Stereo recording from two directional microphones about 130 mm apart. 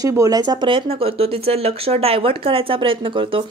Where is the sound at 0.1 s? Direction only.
25° right (ahead or behind).